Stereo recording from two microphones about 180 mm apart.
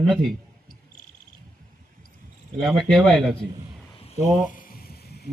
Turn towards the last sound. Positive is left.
turn(degrees=60)  # may be behind; listen again after turning